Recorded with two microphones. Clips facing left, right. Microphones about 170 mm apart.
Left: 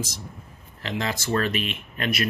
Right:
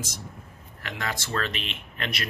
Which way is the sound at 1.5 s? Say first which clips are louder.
Left 7 dB; 25° right (ahead or behind).